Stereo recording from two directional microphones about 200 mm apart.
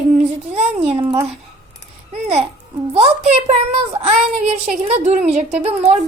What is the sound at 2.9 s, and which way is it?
A woman's voice, 30° right (ahead or behind).